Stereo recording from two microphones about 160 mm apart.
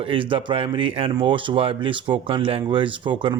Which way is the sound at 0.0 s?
35° right (ahead or behind).